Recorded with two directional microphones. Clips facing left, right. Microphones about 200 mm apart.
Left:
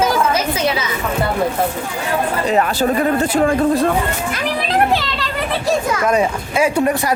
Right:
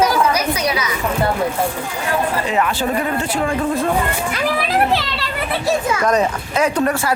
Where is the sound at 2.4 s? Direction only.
40° left (ahead or behind).